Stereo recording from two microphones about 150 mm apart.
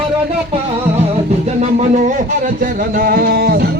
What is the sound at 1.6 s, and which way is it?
Music, 50° right (ahead or behind).